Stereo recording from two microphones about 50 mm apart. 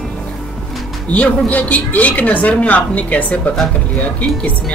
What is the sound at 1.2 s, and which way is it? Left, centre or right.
A woman's voice, left.